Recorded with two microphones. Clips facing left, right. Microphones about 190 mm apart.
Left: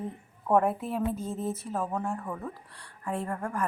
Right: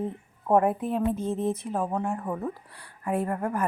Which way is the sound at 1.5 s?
15° right (ahead or behind).